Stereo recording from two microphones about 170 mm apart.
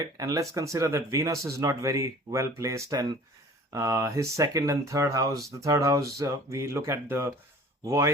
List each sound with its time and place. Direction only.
0.0 s speech: 20° right (ahead or behind)